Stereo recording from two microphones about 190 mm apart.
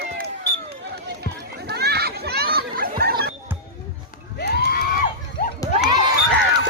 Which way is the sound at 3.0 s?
55° right (ahead or behind).